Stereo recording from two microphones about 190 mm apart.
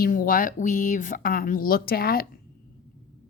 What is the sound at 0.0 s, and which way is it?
A woman's voice, 50° left (ahead or behind).